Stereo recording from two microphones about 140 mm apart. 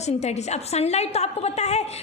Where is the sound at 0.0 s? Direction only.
50° left (ahead or behind).